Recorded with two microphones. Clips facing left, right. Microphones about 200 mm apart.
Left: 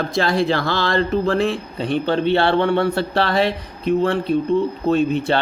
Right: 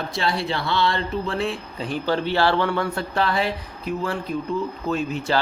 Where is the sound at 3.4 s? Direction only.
75° left (ahead or behind).